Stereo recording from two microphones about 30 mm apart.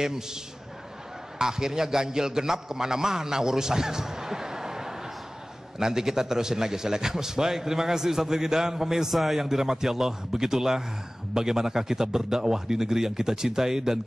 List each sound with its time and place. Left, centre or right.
0.0 s a man's voice: centre
1.4 s a man's voice: centre
9.5 s a man's voice: centre